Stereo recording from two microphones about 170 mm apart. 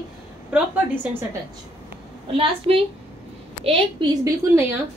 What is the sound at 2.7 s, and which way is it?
A woman's voice, 35° right (ahead or behind).